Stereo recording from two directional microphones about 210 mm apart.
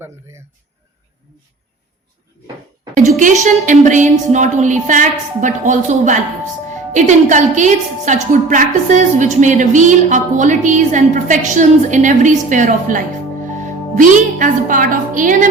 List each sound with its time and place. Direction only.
3.2 s a woman's voice: 35° right (ahead or behind)